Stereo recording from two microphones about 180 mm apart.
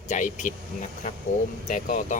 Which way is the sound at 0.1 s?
45° left (ahead or behind).